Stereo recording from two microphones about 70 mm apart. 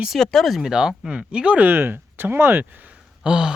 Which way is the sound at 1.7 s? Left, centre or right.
Right.